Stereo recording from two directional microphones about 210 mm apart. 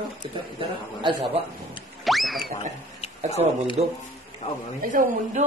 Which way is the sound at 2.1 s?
Centre (ahead or behind).